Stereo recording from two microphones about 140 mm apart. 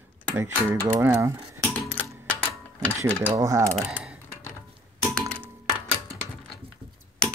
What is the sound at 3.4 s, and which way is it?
Speech, 25° right (ahead or behind).